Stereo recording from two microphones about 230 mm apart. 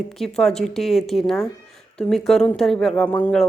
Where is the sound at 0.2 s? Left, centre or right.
Centre.